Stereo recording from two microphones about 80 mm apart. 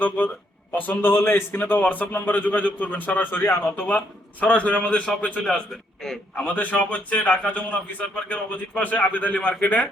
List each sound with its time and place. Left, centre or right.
0.8 s speech: left